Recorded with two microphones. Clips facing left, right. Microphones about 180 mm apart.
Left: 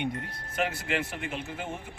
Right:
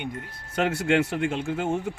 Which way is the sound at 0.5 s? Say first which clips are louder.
Right 8 dB; 80° right.